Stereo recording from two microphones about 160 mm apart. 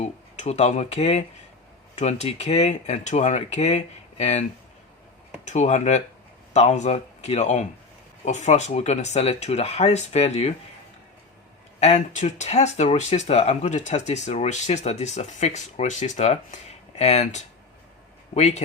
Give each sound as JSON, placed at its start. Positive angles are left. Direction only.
{"t": 0.0, "sound": "speech", "side_deg": 45}
{"t": 5.5, "sound": "speech", "side_deg": 45}
{"t": 11.8, "sound": "speech", "side_deg": 45}